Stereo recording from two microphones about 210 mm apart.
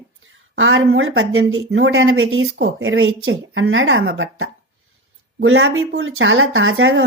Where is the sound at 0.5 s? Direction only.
65° right (ahead or behind).